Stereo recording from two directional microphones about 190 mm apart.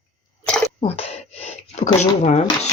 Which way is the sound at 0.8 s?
30° left (ahead or behind).